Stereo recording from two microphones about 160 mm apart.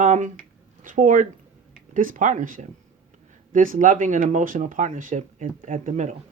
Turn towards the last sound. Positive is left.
turn(degrees=-50)  # may be behind; listen again after turning